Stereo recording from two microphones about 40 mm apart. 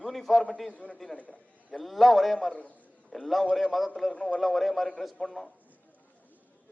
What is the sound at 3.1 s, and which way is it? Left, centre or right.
A man's voice, centre.